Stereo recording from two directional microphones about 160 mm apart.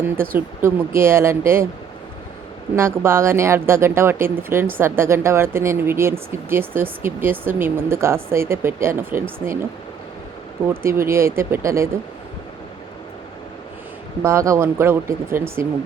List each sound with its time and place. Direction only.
0.3 s speech: 15° right (ahead or behind)
2.7 s speech: 15° right (ahead or behind)
10.8 s speech: 15° right (ahead or behind)
14.2 s speech: 15° right (ahead or behind)